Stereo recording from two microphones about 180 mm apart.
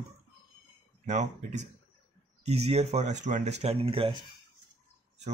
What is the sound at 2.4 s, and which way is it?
Speech, 35° right (ahead or behind).